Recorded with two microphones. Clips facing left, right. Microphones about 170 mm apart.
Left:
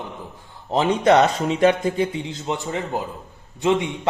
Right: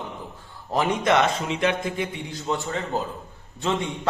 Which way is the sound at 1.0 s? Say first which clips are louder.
Left 7 dB; 40° left (ahead or behind).